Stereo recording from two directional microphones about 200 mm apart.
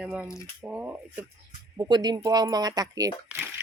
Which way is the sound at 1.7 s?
20° right (ahead or behind).